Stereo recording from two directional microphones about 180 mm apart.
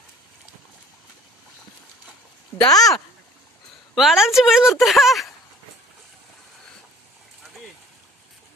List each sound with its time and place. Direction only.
2.6 s speech: 20° left (ahead or behind)
3.9 s a woman's voice: centre (ahead or behind)